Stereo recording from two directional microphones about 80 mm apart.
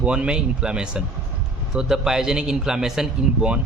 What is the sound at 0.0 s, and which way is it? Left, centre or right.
A man's voice, centre.